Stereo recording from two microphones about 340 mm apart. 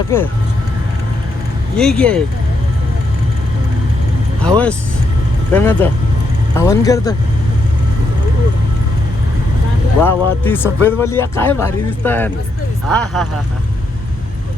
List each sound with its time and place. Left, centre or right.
0.1 s a man's voice: centre
1.8 s speech: centre
4.4 s a man's voice: centre
10.0 s a man's voice: centre